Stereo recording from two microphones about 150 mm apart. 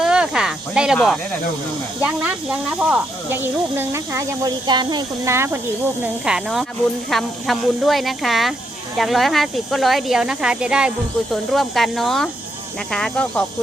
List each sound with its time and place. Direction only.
0.0 s snake: 5° right (ahead or behind)
0.9 s speech: 5° left (ahead or behind)
2.0 s speech: 10° right (ahead or behind); by 5.3 s 30° right (ahead or behind)
5.3 s speech: 15° right (ahead or behind)
6.2 s speech: 5° right (ahead or behind)